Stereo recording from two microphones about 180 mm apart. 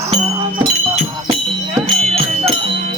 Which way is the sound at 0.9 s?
40° right (ahead or behind).